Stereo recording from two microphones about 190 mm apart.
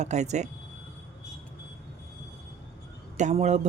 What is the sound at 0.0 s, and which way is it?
Speech, 35° right (ahead or behind).